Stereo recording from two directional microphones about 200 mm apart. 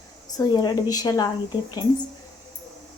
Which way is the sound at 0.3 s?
20° left (ahead or behind).